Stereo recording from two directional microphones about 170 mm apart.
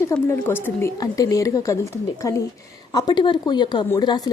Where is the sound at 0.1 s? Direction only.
15° left (ahead or behind).